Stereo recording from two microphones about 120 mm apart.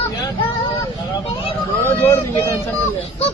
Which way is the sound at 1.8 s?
20° left (ahead or behind).